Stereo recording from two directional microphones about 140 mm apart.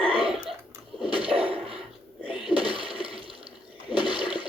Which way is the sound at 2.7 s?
40° right (ahead or behind).